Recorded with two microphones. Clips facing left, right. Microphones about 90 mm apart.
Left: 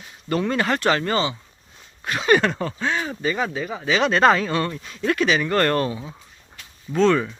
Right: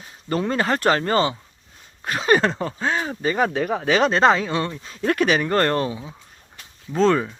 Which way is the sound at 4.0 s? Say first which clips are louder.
Even; 35° right (ahead or behind).